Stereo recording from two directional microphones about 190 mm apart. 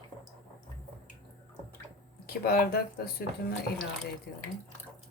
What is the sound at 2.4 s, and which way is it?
Speech, 55° left (ahead or behind).